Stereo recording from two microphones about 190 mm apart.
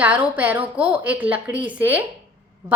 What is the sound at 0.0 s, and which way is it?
A woman's voice, 10° right (ahead or behind).